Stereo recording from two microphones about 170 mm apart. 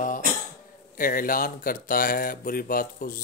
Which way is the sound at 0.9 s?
55° left (ahead or behind).